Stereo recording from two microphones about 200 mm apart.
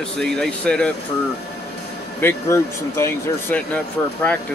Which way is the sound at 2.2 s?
10° left (ahead or behind).